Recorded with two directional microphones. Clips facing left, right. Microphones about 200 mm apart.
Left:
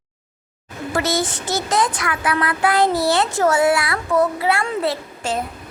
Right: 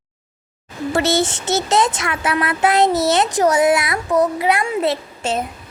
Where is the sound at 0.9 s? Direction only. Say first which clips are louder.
Right 3 dB; 25° right (ahead or behind).